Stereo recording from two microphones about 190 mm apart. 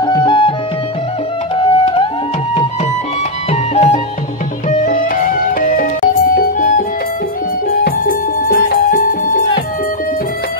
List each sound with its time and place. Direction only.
0.0 s music: 20° left (ahead or behind)
1.6 s music: 25° left (ahead or behind)
3.7 s music: 35° left (ahead or behind)
7.8 s music: 50° left (ahead or behind)